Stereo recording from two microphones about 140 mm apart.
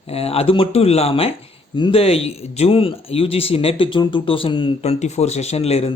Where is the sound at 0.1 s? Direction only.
45° left (ahead or behind).